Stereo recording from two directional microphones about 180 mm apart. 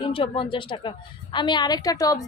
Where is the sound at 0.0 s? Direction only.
30° left (ahead or behind).